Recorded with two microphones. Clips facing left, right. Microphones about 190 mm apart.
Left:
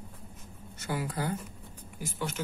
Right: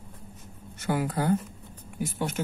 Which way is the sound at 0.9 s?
55° right (ahead or behind).